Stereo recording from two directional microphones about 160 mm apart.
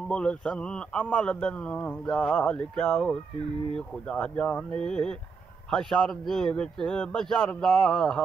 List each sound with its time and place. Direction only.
0.1 s a man's voice: 5° left (ahead or behind)